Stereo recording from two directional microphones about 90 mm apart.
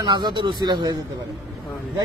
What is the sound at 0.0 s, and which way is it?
Speech, 60° right (ahead or behind).